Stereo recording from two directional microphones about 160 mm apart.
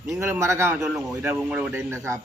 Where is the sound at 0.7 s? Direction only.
Centre (ahead or behind).